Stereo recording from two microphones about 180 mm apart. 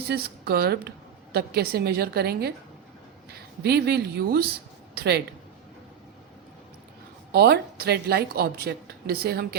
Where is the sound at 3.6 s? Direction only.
65° right (ahead or behind).